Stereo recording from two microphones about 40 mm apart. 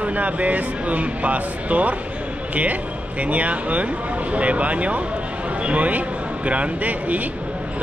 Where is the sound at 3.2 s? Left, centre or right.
Right.